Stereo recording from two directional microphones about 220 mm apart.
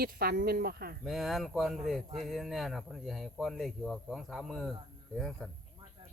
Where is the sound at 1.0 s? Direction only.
Centre (ahead or behind).